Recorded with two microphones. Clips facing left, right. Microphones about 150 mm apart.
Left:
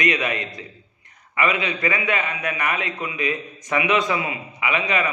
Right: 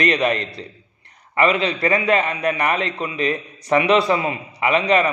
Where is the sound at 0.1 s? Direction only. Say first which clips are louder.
Right 5 dB; 35° right (ahead or behind).